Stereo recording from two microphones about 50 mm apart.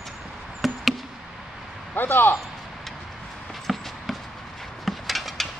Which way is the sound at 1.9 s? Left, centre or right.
Left.